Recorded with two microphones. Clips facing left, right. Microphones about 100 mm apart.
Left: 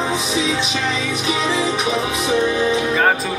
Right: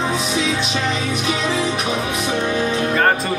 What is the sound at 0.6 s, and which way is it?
Music, 40° right (ahead or behind).